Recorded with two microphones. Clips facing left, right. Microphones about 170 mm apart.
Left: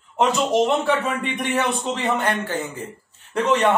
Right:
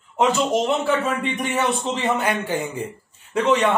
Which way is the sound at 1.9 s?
5° right (ahead or behind).